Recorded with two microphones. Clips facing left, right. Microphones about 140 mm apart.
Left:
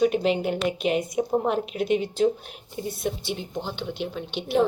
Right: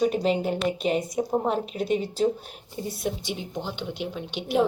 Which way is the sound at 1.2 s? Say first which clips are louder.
Left 2 dB; centre (ahead or behind).